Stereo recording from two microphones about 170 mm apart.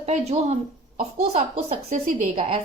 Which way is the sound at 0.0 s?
40° right (ahead or behind).